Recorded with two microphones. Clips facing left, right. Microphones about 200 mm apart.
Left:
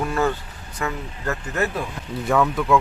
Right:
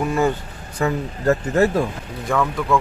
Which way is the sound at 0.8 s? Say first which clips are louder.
Right 6 dB; 35° right (ahead or behind).